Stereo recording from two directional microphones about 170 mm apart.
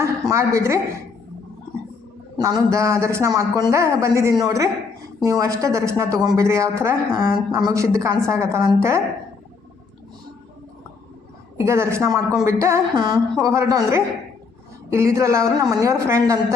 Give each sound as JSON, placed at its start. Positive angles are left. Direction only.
{"t": 0.0, "sound": "a woman's voice", "side_deg": -15}
{"t": 2.4, "sound": "a man's voice", "side_deg": -20}
{"t": 11.5, "sound": "a man's voice", "side_deg": -15}